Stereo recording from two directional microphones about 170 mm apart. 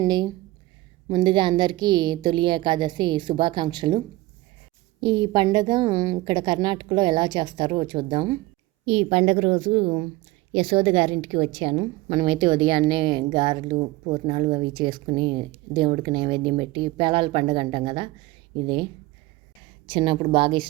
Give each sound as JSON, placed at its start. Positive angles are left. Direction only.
{"t": 0.0, "sound": "a woman's voice", "side_deg": -25}
{"t": 19.9, "sound": "speech", "side_deg": -30}